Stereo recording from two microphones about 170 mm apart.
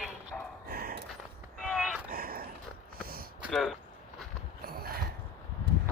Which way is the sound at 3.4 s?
Centre (ahead or behind).